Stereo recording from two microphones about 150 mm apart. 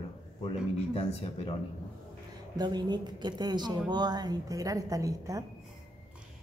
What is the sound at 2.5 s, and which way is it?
A woman's voice, 30° right (ahead or behind).